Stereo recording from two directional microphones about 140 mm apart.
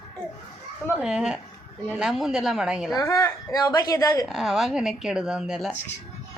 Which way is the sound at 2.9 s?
20° left (ahead or behind).